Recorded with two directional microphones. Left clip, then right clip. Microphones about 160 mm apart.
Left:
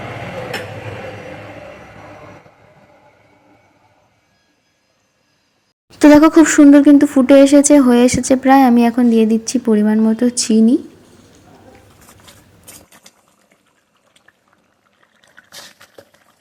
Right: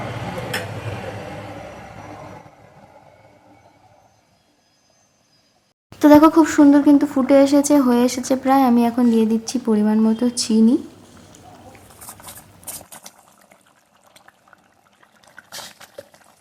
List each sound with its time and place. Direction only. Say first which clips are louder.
6.0 s speech: left 3 dB; 25° left (ahead or behind)